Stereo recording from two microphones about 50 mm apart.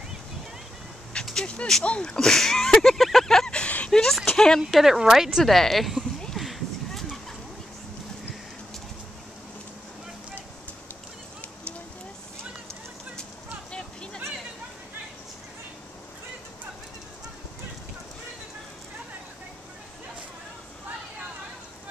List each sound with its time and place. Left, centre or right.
1.3 s speech: left; by 3.4 s centre
3.4 s a sound: centre
3.9 s speech: centre
4.8 s speech: centre
5.4 s speech: centre
6.4 s a sound: centre
13.7 s vehicle: centre